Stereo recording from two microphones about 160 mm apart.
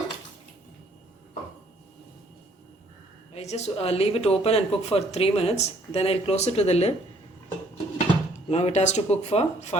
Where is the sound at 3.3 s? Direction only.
45° left (ahead or behind).